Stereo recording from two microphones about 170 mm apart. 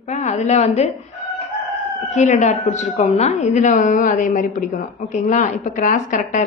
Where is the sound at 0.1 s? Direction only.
45° left (ahead or behind).